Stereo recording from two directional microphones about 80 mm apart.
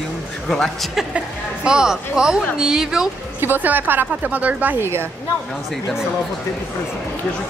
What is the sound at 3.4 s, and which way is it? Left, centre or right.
Speech, right.